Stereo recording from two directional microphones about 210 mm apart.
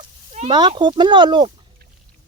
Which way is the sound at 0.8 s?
20° right (ahead or behind).